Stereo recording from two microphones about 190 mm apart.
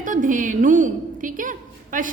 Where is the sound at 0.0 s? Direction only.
45° right (ahead or behind).